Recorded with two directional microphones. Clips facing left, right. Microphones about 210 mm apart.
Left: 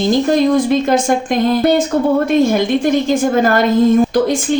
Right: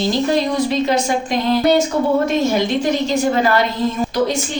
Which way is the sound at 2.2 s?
55° left (ahead or behind).